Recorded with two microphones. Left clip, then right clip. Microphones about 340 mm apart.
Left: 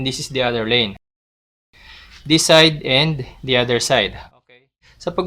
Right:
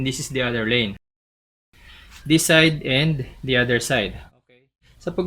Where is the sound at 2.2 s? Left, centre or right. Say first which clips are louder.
Left 4 dB; centre.